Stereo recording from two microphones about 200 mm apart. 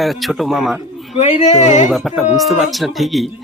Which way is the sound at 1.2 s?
35° left (ahead or behind).